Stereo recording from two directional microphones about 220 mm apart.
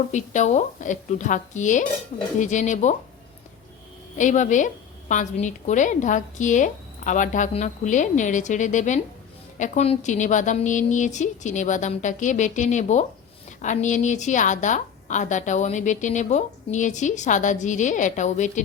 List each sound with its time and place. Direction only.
0.1 s a woman's voice: 35° left (ahead or behind)
4.2 s a woman's voice: 35° left (ahead or behind)